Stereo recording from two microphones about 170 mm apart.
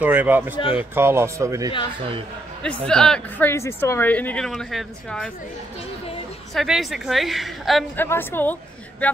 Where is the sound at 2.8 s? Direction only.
5° left (ahead or behind).